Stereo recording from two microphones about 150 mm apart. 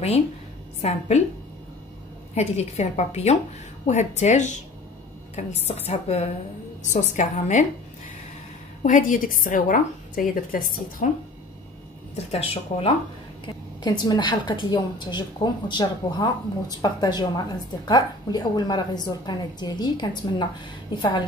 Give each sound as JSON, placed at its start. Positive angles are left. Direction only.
{"t": 0.8, "sound": "a woman's voice", "side_deg": 50}
{"t": 2.3, "sound": "a woman's voice", "side_deg": 45}
{"t": 8.8, "sound": "a woman's voice", "side_deg": 55}
{"t": 12.3, "sound": "speech", "side_deg": 40}
{"t": 13.8, "sound": "a woman's voice", "side_deg": 30}